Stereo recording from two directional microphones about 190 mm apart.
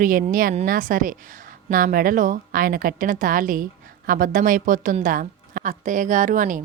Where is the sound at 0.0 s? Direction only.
45° right (ahead or behind).